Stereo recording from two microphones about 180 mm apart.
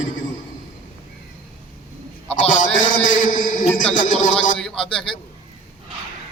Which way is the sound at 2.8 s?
45° left (ahead or behind).